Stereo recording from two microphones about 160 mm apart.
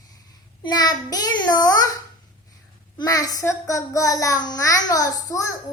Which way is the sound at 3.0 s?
25° left (ahead or behind).